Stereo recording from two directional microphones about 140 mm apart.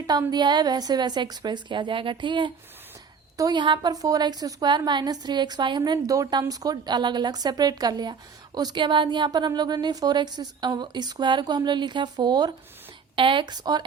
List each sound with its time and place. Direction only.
0.1 s a woman's voice: 30° right (ahead or behind)